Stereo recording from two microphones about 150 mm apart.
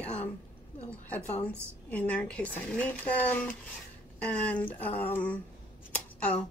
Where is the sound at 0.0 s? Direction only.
45° left (ahead or behind).